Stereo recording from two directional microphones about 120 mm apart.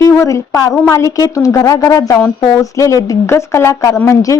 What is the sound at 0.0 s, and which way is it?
A woman's voice, 25° left (ahead or behind).